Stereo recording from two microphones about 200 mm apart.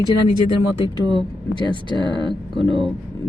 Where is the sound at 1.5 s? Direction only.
20° left (ahead or behind).